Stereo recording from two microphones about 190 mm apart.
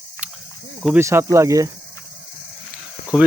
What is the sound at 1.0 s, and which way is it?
Speech, 15° right (ahead or behind).